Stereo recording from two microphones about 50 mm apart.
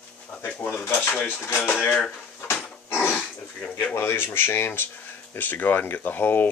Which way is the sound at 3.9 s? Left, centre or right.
Left.